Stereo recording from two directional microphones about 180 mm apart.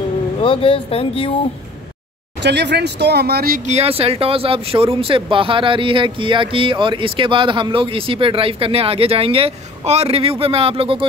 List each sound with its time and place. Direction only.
0.4 s speech: 30° left (ahead or behind)
2.4 s speech: 70° right (ahead or behind); by 3.7 s 50° right (ahead or behind)
3.7 s speech: 35° right (ahead or behind)